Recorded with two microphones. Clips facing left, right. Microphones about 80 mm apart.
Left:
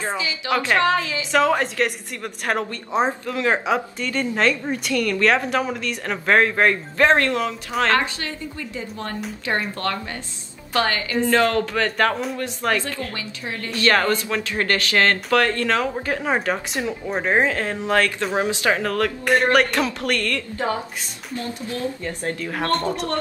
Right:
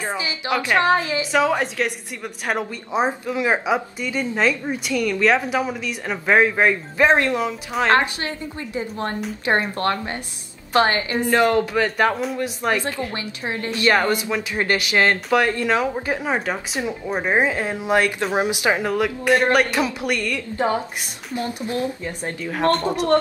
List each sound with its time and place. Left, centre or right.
0.7 s speech: right
1.3 s a woman's voice: centre
7.9 s speech: right
11.1 s a woman's voice: centre
16.3 s a woman's voice: centre